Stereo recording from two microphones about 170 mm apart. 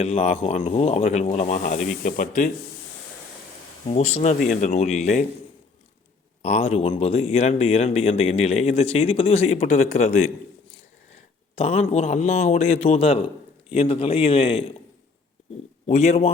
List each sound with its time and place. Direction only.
0.0 s a man's voice: 40° left (ahead or behind)
3.8 s speech: 40° left (ahead or behind)
6.4 s a man's voice: 40° left (ahead or behind)
11.5 s a man's voice: 40° left (ahead or behind)
15.9 s a man's voice: 40° left (ahead or behind)